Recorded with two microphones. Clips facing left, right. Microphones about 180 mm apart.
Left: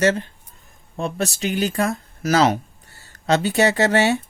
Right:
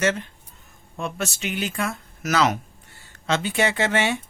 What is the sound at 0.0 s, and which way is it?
Speech, 35° left (ahead or behind).